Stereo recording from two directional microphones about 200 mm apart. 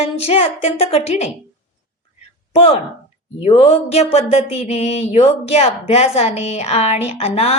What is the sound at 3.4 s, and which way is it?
Mantra, 30° left (ahead or behind).